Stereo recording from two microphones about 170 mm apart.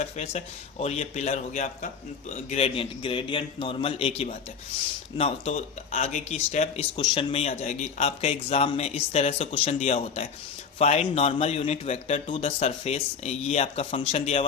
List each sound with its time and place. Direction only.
0.0 s speech: 40° left (ahead or behind)